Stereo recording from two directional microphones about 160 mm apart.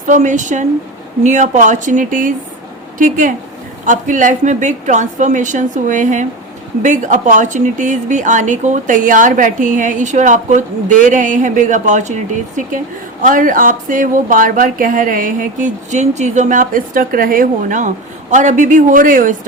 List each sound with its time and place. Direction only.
0.1 s speech: 50° right (ahead or behind)